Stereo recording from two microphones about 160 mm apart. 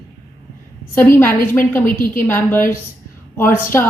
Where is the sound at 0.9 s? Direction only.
15° left (ahead or behind).